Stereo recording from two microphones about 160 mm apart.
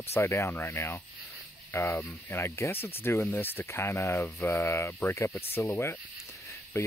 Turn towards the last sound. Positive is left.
turn(degrees=15)  # may be behind; listen again after turning